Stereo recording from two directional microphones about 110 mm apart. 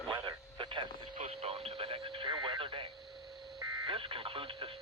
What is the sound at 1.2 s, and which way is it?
Radio, 60° right (ahead or behind).